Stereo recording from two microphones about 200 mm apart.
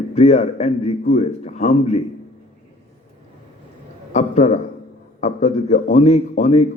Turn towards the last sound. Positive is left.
turn(degrees=35)  # may be behind; listen again after turning